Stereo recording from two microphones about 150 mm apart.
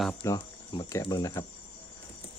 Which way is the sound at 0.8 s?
25° left (ahead or behind).